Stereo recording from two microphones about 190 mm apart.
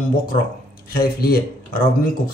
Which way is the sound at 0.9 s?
55° left (ahead or behind).